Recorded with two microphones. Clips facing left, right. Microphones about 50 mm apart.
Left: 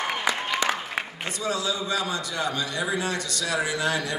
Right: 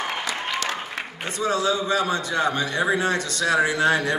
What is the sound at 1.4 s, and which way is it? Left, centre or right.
A man's voice, right.